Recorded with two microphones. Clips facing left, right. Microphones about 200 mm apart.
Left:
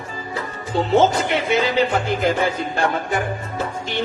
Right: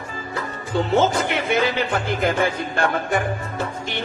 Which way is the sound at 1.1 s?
55° right (ahead or behind).